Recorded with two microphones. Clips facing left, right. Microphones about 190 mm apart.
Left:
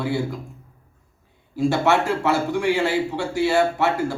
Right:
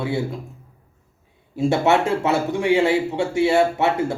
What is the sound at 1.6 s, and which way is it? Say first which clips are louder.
A man's voice: right 1 dB; 25° right (ahead or behind).